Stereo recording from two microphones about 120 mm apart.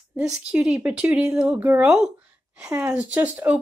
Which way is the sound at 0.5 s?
5° right (ahead or behind).